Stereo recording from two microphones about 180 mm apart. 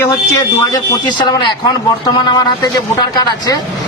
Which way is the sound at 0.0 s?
20° left (ahead or behind).